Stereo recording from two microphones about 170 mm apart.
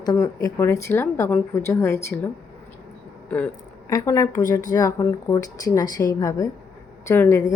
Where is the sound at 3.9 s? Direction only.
20° left (ahead or behind).